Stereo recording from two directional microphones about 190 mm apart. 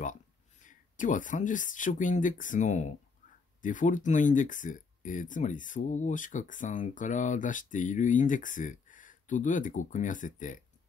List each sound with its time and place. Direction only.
0.6 s speech: 40° left (ahead or behind)